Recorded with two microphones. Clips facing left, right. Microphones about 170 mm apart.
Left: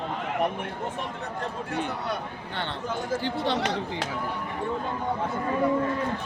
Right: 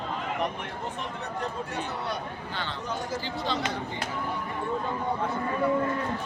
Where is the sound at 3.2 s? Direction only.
65° left (ahead or behind).